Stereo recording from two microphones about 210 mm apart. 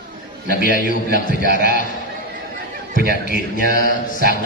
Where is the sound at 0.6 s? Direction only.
40° left (ahead or behind).